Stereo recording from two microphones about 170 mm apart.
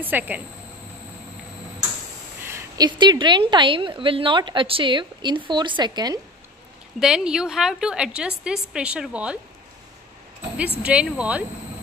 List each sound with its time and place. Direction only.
0.0 s speech: 10° right (ahead or behind)
2.4 s a sound: 15° right (ahead or behind)
3.0 s a woman's voice: 25° right (ahead or behind)
7.0 s a woman's voice: 5° right (ahead or behind)
10.8 s speech: 5° right (ahead or behind)